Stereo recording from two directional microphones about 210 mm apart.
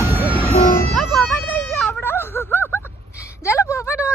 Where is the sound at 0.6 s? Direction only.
45° left (ahead or behind).